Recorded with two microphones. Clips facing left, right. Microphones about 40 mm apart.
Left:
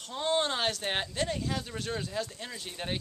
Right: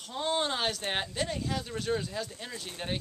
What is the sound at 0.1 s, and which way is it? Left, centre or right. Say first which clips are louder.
Speech: left 1 dB; centre.